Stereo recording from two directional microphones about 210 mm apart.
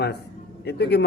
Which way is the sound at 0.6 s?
50° left (ahead or behind).